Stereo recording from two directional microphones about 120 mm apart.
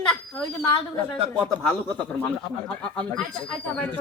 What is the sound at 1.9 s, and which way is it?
Speech, 10° left (ahead or behind).